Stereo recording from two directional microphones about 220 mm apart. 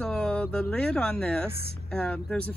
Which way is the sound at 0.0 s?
5° left (ahead or behind).